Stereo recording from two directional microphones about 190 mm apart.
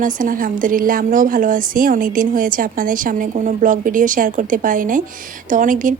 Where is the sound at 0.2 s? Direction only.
45° right (ahead or behind).